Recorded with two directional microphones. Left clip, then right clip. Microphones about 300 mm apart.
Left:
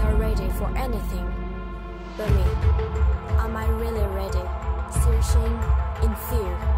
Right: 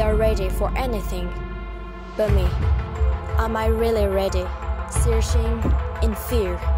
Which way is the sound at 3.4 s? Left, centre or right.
Right.